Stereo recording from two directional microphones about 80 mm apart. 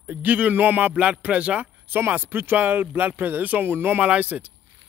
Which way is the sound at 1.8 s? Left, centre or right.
Right.